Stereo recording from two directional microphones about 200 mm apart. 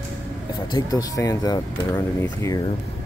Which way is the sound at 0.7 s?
20° left (ahead or behind).